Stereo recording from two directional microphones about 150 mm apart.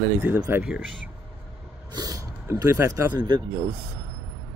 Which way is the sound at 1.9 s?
25° right (ahead or behind).